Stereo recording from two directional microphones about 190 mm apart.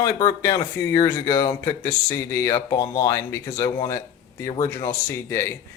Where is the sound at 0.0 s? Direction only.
20° left (ahead or behind).